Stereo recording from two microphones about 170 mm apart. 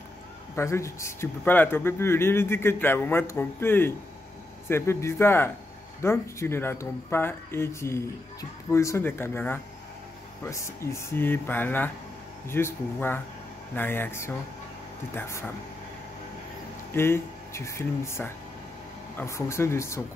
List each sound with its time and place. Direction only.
0.6 s speech: 15° left (ahead or behind)
16.9 s speech: 15° left (ahead or behind)